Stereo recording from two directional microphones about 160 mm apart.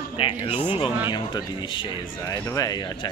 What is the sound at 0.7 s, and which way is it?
Speech, 35° left (ahead or behind).